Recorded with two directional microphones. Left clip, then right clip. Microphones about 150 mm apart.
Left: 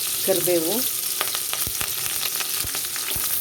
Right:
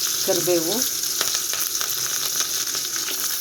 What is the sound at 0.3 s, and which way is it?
Speech, 15° left (ahead or behind).